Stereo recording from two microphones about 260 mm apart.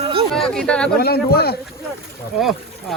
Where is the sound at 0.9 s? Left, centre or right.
Left.